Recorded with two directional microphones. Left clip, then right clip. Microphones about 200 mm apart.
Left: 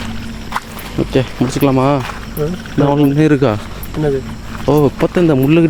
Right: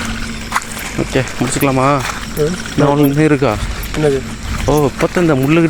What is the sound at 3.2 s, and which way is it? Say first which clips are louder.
Speech: even; 35° left (ahead or behind).